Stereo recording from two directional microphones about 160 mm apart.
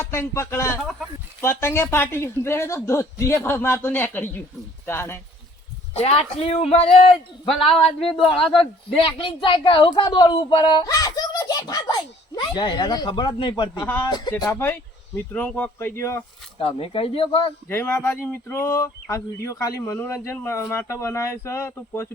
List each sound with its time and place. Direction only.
0.0 s speech: 15° left (ahead or behind)
0.8 s speech: centre (ahead or behind)
1.4 s speech: 15° left (ahead or behind)
5.9 s speech: 40° left (ahead or behind)
9.0 s speech: 30° left (ahead or behind)
13.8 s speech: 10° left (ahead or behind)
14.1 s speech: 25° left (ahead or behind)
16.6 s speech: 35° left (ahead or behind)
17.7 s speech: 15° left (ahead or behind)